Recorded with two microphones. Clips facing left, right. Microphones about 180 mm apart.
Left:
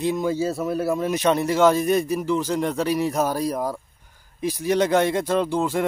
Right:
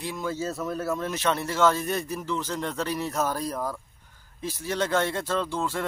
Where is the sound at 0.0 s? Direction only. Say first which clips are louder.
Left 8 dB; 20° left (ahead or behind).